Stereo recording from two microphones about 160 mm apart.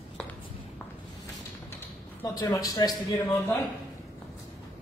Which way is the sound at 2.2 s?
20° left (ahead or behind).